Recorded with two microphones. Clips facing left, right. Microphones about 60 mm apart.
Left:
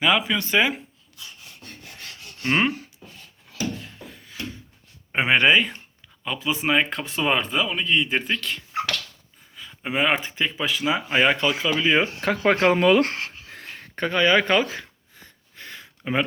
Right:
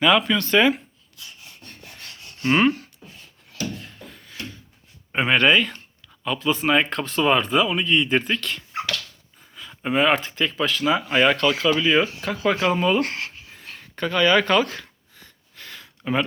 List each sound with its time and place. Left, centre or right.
0.0 s speech: centre
1.6 s rub: centre
3.8 s a sound: centre
5.1 s speech: centre
12.2 s speech: left
13.0 s a sound: left
13.7 s gasp: left